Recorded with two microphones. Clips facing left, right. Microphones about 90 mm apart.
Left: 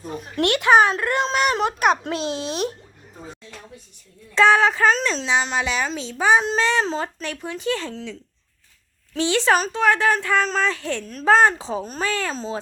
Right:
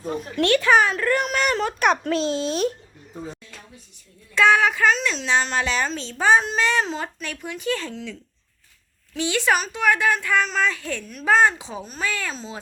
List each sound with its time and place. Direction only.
0.4 s speech: 20° left (ahead or behind)
4.4 s speech: 30° left (ahead or behind)
5.2 s speech: 15° left (ahead or behind)
6.4 s speech: 30° left (ahead or behind)